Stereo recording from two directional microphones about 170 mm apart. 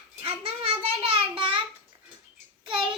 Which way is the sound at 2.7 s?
30° right (ahead or behind).